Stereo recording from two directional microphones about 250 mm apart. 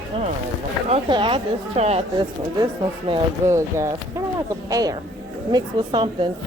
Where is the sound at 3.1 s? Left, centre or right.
Centre.